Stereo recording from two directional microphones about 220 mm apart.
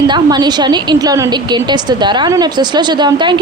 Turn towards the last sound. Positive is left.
turn(degrees=-20)  # may be behind; listen again after turning